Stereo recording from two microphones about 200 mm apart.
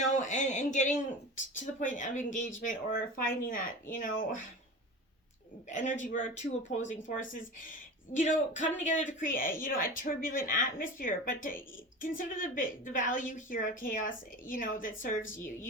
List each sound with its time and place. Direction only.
0.0 s a woman's voice: 35° left (ahead or behind)
5.7 s a woman's voice: 40° left (ahead or behind)